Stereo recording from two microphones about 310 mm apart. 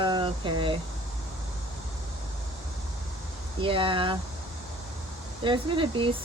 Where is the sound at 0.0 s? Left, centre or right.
Centre.